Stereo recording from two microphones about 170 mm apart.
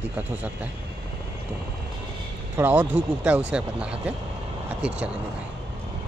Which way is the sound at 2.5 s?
10° right (ahead or behind).